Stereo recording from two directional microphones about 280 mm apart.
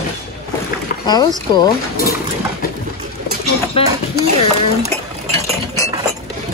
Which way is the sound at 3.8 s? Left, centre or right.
Left.